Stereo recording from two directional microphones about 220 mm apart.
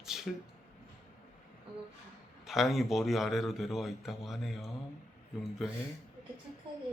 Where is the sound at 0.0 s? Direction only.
Centre (ahead or behind).